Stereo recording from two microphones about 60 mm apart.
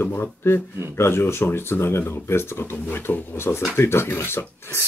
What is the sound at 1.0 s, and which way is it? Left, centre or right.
Speech, left.